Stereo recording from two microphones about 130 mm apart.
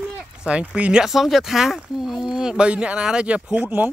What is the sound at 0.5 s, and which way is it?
Speech, 10° right (ahead or behind).